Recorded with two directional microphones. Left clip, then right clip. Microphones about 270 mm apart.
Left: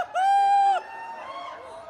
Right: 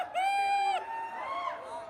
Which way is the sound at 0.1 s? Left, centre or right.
Centre.